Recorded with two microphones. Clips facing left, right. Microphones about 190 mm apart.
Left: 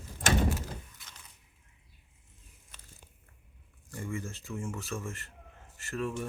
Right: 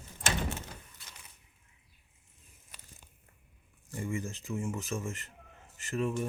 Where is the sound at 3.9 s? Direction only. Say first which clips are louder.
Right 2 dB; 20° right (ahead or behind).